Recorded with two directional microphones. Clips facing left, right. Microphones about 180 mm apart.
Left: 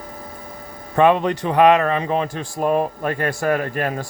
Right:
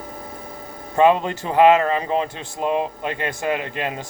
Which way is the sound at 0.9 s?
30° right (ahead or behind).